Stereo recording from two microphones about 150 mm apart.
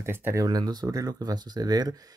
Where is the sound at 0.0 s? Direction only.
15° right (ahead or behind).